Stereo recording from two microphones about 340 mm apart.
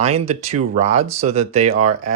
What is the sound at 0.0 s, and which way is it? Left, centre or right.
Speech, centre.